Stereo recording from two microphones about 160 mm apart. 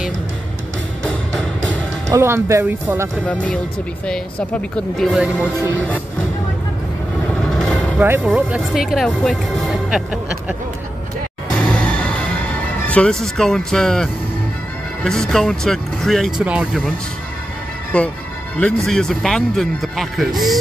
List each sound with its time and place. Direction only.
1.0 s music: 5° left (ahead or behind)
2.0 s speech: 15° right (ahead or behind)
3.3 s speech: 5° left (ahead or behind)
7.5 s vehicle: 5° left (ahead or behind)
8.0 s speech: 10° right (ahead or behind)
11.5 s music: 5° left (ahead or behind)
12.8 s speech: 5° left (ahead or behind)
17.9 s speech: 5° left (ahead or behind)